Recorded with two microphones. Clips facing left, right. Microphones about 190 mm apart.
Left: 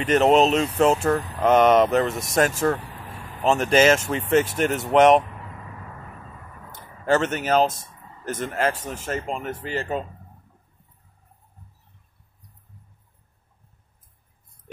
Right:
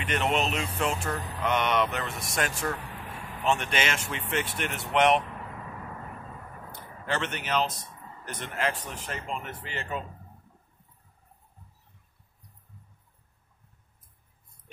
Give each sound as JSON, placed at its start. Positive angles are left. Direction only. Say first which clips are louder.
{"t": 0.0, "sound": "speech", "louder": "left 11 dB", "side_deg": 40}
{"t": 3.4, "sound": "speech", "louder": "left 11 dB", "side_deg": 40}
{"t": 7.1, "sound": "speech", "louder": "left 10 dB", "side_deg": 45}